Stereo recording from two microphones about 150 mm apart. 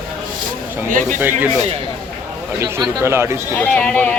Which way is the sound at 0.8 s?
60° right (ahead or behind).